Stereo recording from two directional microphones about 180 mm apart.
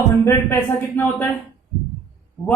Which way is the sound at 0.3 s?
15° left (ahead or behind).